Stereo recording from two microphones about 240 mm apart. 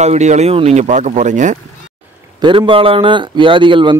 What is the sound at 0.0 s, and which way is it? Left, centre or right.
A man's voice, right.